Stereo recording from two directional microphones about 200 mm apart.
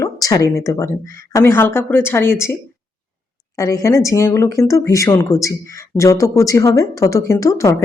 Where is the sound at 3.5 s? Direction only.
15° left (ahead or behind).